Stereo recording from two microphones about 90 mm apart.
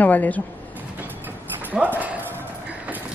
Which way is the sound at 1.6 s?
20° right (ahead or behind).